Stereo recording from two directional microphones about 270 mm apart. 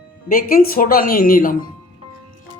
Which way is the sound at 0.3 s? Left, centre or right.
Left.